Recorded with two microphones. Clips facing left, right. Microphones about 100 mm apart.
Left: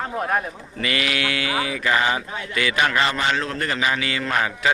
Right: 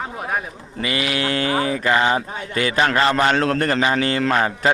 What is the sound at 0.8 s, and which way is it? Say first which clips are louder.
Speech: right 2 dB; 25° right (ahead or behind).